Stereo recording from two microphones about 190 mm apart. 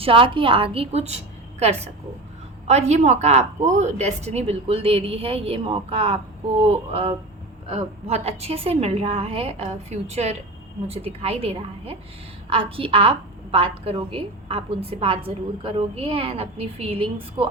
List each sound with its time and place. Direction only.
0.0 s a woman's voice: 30° right (ahead or behind)